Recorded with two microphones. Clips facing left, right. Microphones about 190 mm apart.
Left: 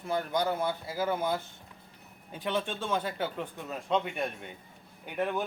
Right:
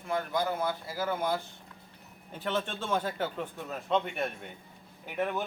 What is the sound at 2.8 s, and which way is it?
A man's voice, 5° right (ahead or behind).